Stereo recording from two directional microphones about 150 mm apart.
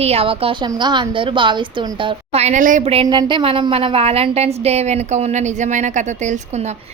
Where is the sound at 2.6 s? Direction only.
60° right (ahead or behind).